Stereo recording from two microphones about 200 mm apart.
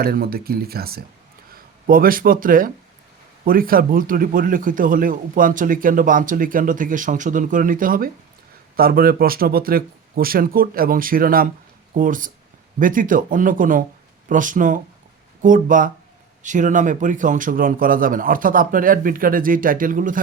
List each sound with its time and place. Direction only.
0.0 s speech: 50° right (ahead or behind)